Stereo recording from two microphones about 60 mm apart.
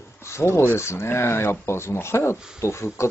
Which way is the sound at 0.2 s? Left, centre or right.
Left.